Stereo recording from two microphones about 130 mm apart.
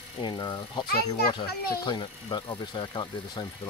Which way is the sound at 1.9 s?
40° left (ahead or behind).